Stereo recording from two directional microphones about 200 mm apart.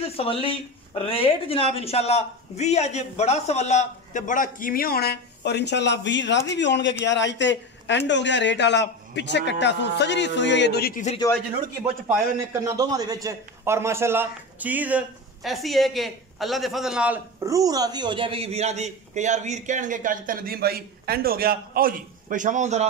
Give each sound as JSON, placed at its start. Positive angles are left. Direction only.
{"t": 0.2, "sound": "a man's voice", "side_deg": 30}
{"t": 11.8, "sound": "a man's voice", "side_deg": -15}